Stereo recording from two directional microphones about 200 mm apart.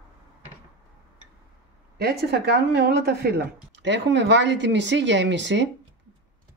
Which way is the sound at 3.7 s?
60° right (ahead or behind).